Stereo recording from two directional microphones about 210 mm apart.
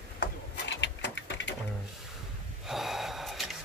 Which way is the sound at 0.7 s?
55° left (ahead or behind).